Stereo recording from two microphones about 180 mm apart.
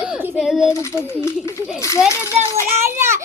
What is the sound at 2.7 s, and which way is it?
Speech, 15° right (ahead or behind).